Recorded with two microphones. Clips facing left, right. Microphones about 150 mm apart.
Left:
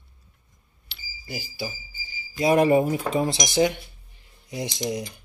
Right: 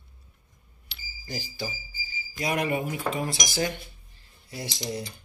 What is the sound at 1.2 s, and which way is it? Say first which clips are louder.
Speech: left 2 dB; 10° left (ahead or behind).